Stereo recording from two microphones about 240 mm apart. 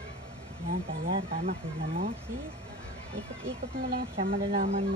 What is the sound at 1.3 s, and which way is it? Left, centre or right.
Speech, right.